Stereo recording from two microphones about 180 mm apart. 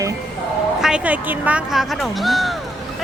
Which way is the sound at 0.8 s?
5° right (ahead or behind).